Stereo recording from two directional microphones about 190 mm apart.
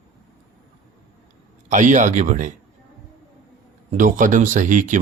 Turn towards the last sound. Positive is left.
turn(degrees=-40)  # may be behind; listen again after turning